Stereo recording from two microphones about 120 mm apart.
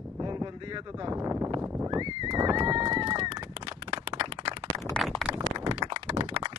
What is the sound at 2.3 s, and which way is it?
Speech, 30° right (ahead or behind).